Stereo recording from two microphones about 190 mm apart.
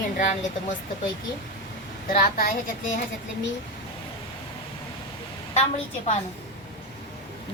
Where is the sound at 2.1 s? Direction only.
50° left (ahead or behind).